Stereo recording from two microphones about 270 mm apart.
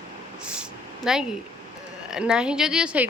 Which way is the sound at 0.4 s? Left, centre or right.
Centre.